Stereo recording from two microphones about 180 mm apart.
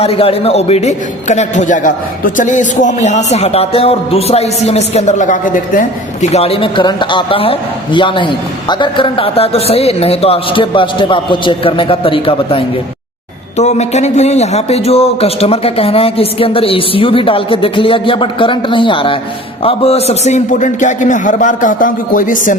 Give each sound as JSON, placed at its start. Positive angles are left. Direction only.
{"t": 0.0, "sound": "a man's voice", "side_deg": 35}
{"t": 6.3, "sound": "a man's voice", "side_deg": 35}